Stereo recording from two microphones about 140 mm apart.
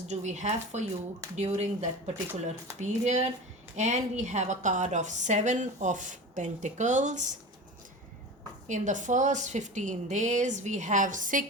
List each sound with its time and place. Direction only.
0.1 s a woman's voice: 55° right (ahead or behind)
8.6 s a woman's voice: 60° right (ahead or behind)